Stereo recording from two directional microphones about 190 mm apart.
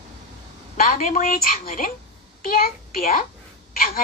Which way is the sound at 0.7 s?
45° left (ahead or behind).